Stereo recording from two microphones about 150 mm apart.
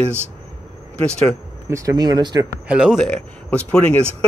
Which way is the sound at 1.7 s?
20° right (ahead or behind).